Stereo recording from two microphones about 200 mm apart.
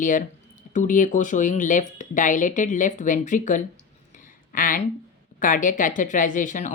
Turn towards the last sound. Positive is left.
turn(degrees=40)  # may be behind; listen again after turning